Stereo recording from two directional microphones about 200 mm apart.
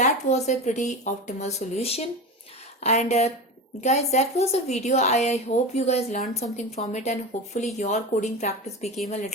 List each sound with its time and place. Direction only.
0.0 s a woman's voice: 35° left (ahead or behind)